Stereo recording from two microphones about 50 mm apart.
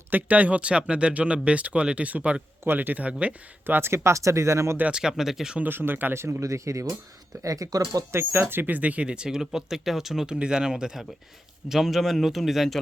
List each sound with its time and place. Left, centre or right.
0.1 s speech: right
2.6 s speech: right
3.7 s speech: right
4.9 s speech: centre
5.6 s speech: right
6.1 s speech: right
8.1 s speech: right; by 10.3 s centre
10.3 s speech: centre
11.7 s a man's voice: centre